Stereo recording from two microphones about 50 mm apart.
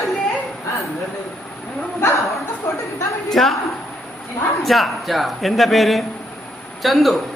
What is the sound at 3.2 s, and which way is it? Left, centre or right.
Speech, centre.